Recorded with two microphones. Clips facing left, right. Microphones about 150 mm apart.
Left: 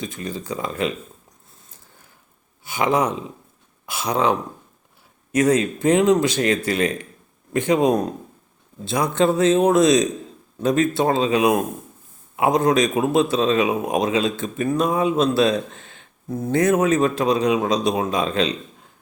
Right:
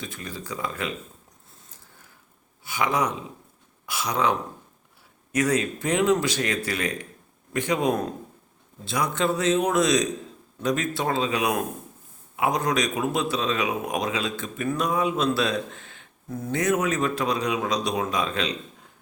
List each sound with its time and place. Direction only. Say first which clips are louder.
0.0 s speech: left 7 dB; 20° left (ahead or behind)
2.6 s speech: left 5 dB; 25° left (ahead or behind)
15.7 s a sound: left 1 dB; 20° left (ahead or behind)
16.4 s speech: left 6 dB; 35° left (ahead or behind)